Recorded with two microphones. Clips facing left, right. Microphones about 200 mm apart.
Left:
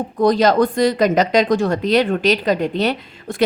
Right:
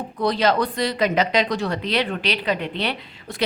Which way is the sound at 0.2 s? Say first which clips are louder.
Left 6 dB; 45° left (ahead or behind).